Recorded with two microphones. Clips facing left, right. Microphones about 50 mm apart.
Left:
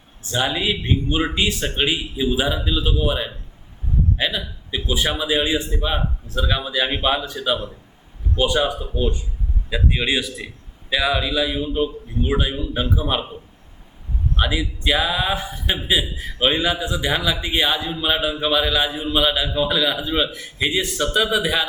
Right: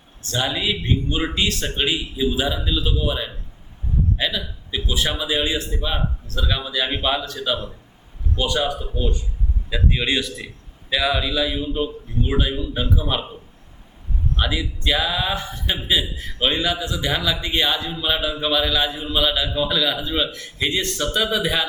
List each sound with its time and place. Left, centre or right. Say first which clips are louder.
0.2 s a man's voice: left 2 dB; centre
14.3 s a man's voice: left 2 dB; centre